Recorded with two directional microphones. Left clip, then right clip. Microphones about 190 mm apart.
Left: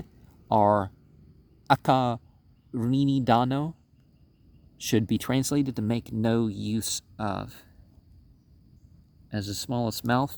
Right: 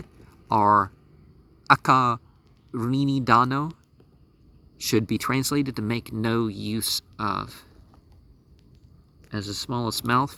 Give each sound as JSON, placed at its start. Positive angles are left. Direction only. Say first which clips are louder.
{"t": 0.4, "sound": "speech", "louder": "right 3 dB", "side_deg": 25}
{"t": 4.9, "sound": "speech", "louder": "right 3 dB", "side_deg": 25}
{"t": 9.3, "sound": "speech", "louder": "right 2 dB", "side_deg": 20}